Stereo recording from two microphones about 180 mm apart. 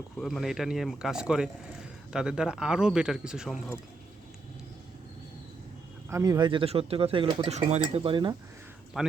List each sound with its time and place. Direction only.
0.2 s speech: centre (ahead or behind)
6.1 s speech: 15° right (ahead or behind)
8.9 s speech: centre (ahead or behind)